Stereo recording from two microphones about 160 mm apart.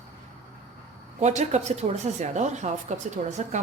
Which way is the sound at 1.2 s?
45° right (ahead or behind).